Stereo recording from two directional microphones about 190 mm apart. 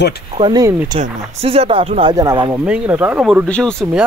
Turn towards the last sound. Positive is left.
turn(degrees=5)  # may be behind; listen again after turning